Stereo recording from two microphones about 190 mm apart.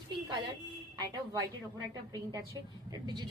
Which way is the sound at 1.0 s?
20° right (ahead or behind).